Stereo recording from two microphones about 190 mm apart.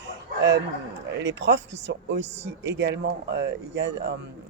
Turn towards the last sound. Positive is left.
turn(degrees=-65)  # may be behind; listen again after turning